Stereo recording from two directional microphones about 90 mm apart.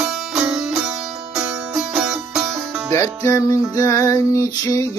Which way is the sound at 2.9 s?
30° left (ahead or behind).